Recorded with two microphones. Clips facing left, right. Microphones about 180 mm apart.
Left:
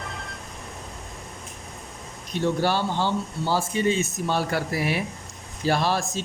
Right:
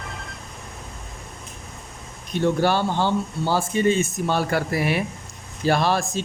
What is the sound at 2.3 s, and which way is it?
Speech, 55° right (ahead or behind).